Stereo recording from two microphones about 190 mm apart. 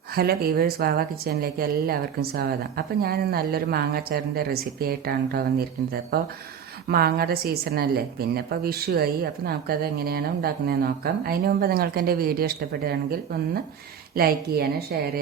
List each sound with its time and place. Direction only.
0.1 s a woman's voice: 55° right (ahead or behind)